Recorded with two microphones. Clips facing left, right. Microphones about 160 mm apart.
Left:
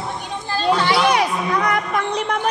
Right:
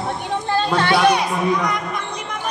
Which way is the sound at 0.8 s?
55° right (ahead or behind).